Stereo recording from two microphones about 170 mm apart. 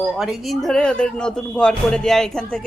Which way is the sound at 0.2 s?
Centre (ahead or behind).